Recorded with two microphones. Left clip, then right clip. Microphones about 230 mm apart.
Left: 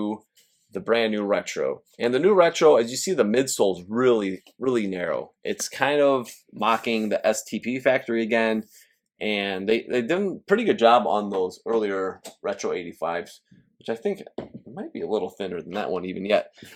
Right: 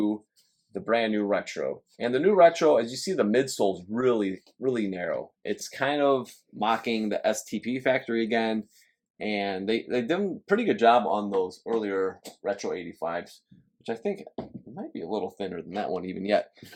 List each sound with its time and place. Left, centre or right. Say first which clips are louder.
0.7 s speech: left 3 dB; left